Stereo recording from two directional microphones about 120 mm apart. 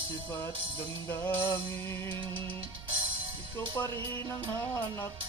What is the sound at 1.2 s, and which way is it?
Music, 20° left (ahead or behind).